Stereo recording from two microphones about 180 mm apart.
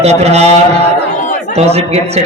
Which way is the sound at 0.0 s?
35° right (ahead or behind).